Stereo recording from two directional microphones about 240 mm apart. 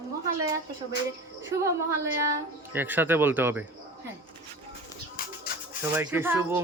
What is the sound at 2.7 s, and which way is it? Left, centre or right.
Speech, centre.